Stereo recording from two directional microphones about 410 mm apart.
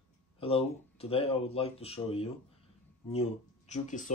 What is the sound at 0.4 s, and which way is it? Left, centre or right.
Speech, centre.